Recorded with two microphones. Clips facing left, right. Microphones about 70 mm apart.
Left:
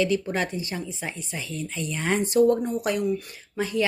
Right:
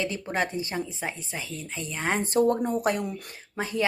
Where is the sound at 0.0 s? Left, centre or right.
Right.